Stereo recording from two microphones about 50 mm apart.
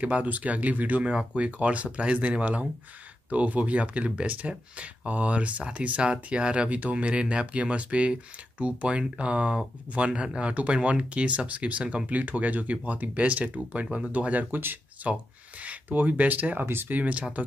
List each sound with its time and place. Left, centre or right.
0.0 s speech: right
13.8 s speech: centre
14.1 s speech: right
16.6 s speech: right
16.9 s speech: right